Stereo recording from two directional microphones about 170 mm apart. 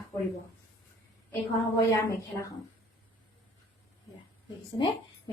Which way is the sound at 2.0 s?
15° left (ahead or behind).